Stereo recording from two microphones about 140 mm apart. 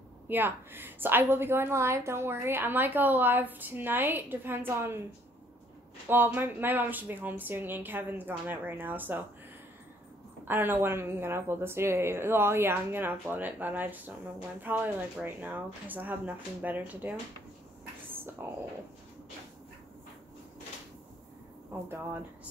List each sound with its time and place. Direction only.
0.3 s a woman's voice: 15° right (ahead or behind)
6.0 s a woman's voice: 15° right (ahead or behind)
10.4 s a woman's voice: 15° right (ahead or behind)
18.1 s whispering: 15° right (ahead or behind)
21.8 s a woman's voice: 15° right (ahead or behind)